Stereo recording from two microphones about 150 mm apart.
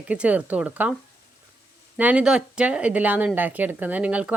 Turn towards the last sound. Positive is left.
turn(degrees=-10)  # may be behind; listen again after turning